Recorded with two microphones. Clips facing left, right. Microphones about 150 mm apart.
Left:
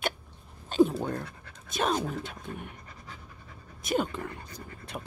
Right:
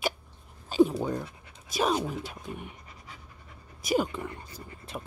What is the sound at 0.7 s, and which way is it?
Speech, 5° right (ahead or behind).